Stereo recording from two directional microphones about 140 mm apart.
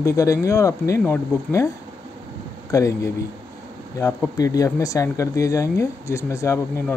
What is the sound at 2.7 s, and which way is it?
Speech, 25° left (ahead or behind).